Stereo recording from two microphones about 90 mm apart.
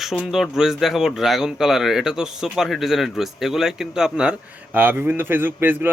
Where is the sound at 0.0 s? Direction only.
5° right (ahead or behind).